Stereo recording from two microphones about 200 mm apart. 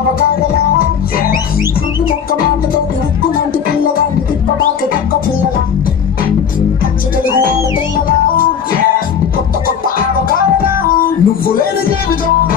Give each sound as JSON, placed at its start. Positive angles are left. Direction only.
{"t": 10.6, "sound": "music", "side_deg": 45}